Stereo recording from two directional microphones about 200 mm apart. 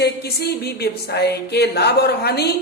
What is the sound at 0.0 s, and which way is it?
A woman's voice, 55° left (ahead or behind).